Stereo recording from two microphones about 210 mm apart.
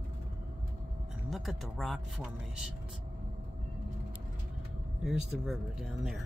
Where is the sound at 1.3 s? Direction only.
Centre (ahead or behind).